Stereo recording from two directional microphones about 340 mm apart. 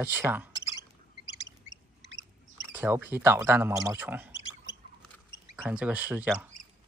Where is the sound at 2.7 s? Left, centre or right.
Centre.